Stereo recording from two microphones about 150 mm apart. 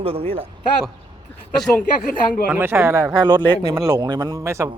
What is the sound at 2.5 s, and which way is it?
A man's voice, 15° right (ahead or behind).